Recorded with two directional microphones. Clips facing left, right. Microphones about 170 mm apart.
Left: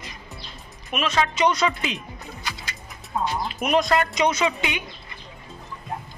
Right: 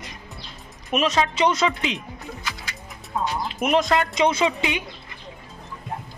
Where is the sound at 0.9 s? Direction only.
35° right (ahead or behind); by 2.0 s 20° right (ahead or behind).